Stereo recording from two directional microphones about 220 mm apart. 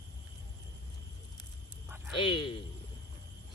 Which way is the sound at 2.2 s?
20° left (ahead or behind).